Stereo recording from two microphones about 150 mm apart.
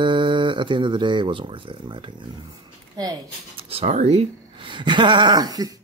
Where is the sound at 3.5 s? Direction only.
40° right (ahead or behind).